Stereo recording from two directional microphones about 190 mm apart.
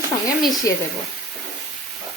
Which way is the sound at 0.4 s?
20° left (ahead or behind).